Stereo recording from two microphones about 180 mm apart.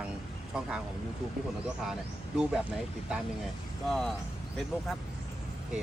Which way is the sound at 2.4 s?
5° right (ahead or behind).